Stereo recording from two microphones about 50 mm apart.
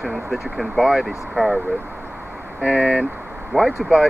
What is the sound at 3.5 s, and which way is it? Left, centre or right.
Speech, centre.